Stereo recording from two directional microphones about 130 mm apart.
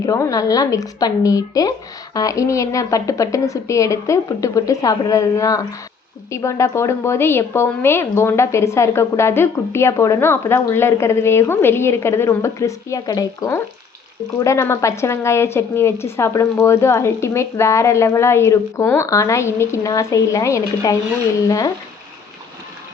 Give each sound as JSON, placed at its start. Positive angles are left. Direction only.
{"t": 0.0, "sound": "a woman's voice", "side_deg": 25}